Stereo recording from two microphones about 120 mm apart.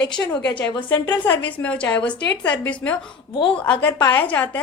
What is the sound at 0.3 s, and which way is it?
A woman's voice, 10° left (ahead or behind).